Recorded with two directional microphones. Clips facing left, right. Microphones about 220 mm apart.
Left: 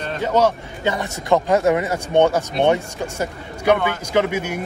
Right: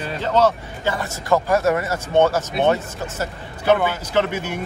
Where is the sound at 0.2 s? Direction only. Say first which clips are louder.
Even; 10° left (ahead or behind).